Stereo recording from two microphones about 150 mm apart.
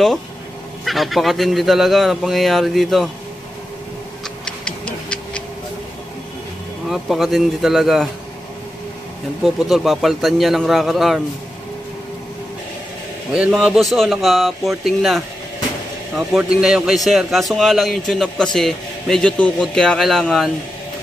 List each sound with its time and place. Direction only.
0.8 s a man's voice: centre (ahead or behind)
4.5 s tick-tock: 5° left (ahead or behind)
6.9 s a man's voice: centre (ahead or behind)
9.4 s a man's voice: centre (ahead or behind)
13.3 s a man's voice: 5° right (ahead or behind)
16.3 s a man's voice: 5° right (ahead or behind)